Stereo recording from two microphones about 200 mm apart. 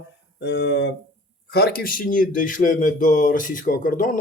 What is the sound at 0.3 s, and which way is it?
Speech, 55° left (ahead or behind).